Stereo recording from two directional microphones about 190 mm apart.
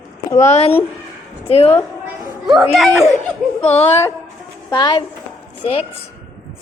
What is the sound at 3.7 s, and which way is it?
A woman's voice, 35° left (ahead or behind).